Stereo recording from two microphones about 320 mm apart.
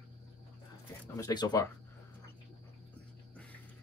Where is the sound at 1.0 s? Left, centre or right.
Centre.